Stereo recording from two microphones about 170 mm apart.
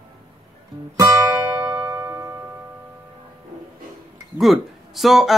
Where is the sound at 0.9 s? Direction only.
20° right (ahead or behind).